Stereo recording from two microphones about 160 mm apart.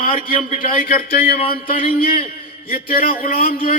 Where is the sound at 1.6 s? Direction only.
60° left (ahead or behind).